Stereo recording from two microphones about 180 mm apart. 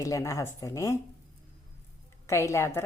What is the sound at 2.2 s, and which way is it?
Speech, 15° left (ahead or behind).